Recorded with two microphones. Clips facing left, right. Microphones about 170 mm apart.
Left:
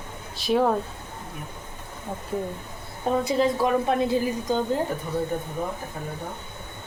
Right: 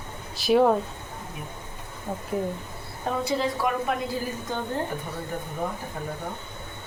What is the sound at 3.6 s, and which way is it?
A woman's voice, 25° left (ahead or behind).